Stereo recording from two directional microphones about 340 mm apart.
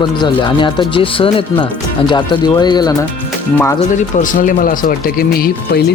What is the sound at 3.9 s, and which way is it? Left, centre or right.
Speech, left.